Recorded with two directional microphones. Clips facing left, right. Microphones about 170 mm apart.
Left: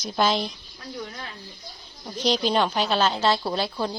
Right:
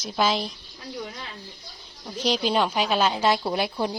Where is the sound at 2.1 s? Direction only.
10° right (ahead or behind).